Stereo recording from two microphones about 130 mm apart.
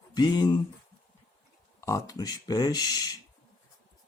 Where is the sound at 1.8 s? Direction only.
25° left (ahead or behind).